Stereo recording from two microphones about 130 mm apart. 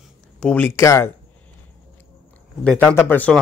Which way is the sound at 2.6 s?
15° left (ahead or behind).